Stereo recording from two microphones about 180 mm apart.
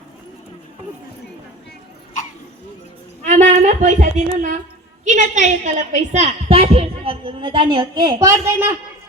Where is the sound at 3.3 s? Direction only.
45° right (ahead or behind); by 8.7 s 15° right (ahead or behind).